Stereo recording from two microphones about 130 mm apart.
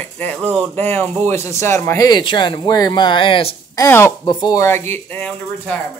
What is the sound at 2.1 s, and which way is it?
Speech, 35° left (ahead or behind).